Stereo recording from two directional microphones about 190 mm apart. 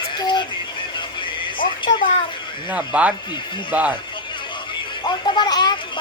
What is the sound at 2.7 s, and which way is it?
Speech, 5° right (ahead or behind).